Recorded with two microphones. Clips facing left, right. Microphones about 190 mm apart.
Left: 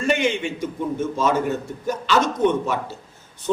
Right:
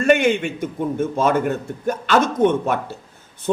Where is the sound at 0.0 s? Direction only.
55° right (ahead or behind).